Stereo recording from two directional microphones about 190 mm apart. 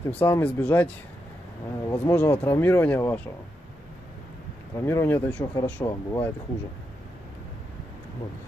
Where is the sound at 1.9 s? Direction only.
10° left (ahead or behind).